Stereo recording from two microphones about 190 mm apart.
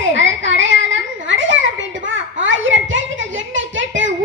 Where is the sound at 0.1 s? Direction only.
80° right.